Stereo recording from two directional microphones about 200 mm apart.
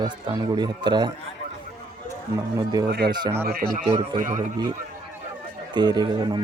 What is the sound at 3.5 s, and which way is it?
Speech, 45° right (ahead or behind).